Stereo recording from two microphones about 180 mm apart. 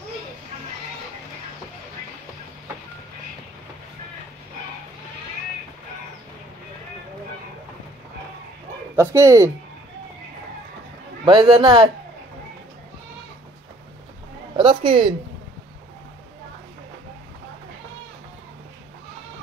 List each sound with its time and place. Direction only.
8.9 s speech: 15° right (ahead or behind)
11.2 s a man's voice: 25° right (ahead or behind)
14.6 s a sound: 25° right (ahead or behind)